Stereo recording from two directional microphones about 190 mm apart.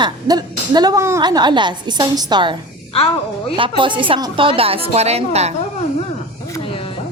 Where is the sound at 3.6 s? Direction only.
25° right (ahead or behind).